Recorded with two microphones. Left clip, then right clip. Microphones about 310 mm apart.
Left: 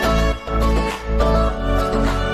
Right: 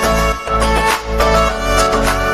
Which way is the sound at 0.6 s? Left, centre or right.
Right.